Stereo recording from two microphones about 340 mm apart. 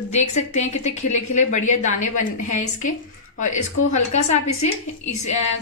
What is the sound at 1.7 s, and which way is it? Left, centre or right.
Speech, left.